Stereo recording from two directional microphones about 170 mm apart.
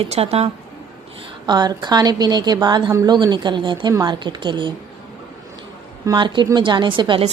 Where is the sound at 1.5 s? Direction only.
25° right (ahead or behind).